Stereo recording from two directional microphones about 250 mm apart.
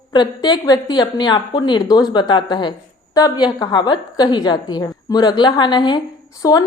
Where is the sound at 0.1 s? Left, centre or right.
Centre.